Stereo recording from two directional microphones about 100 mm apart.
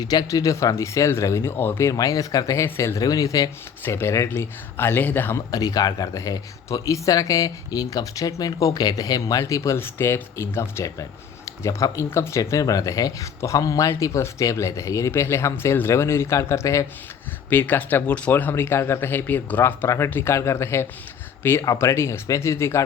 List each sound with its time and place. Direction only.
0.0 s speech: 40° left (ahead or behind); by 1.9 s 20° left (ahead or behind)
1.9 s speech: 35° left (ahead or behind)
3.8 s speech: 25° left (ahead or behind)
5.5 s speech: 40° left (ahead or behind)
17.5 s speech: 20° left (ahead or behind)